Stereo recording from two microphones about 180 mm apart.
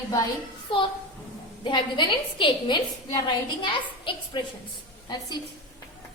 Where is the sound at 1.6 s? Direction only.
25° left (ahead or behind).